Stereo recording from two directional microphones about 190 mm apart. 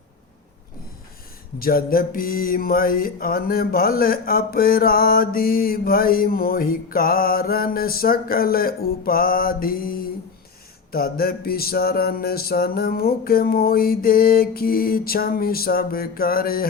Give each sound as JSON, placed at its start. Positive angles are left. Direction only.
{"t": 1.5, "sound": "mantra", "side_deg": 50}